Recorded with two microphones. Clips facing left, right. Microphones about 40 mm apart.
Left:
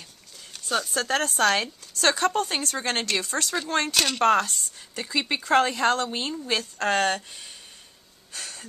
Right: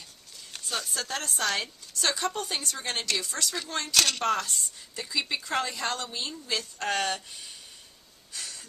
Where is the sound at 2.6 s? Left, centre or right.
Left.